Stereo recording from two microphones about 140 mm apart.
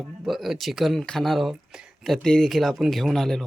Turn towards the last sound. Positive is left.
turn(degrees=0)  # may be behind; listen again after turning